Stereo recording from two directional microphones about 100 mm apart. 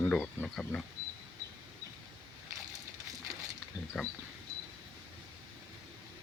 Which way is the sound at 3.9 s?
Centre (ahead or behind).